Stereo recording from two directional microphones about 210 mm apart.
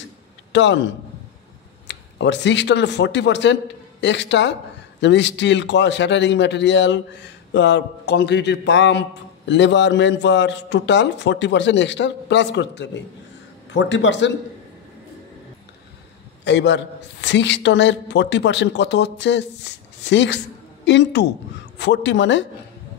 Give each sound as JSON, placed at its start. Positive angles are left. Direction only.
{"t": 0.5, "sound": "a man's voice", "side_deg": 60}
{"t": 1.9, "sound": "a man's voice", "side_deg": 55}
{"t": 16.4, "sound": "a man's voice", "side_deg": 55}